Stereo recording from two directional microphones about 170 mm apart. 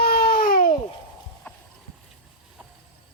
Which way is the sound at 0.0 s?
60° left (ahead or behind).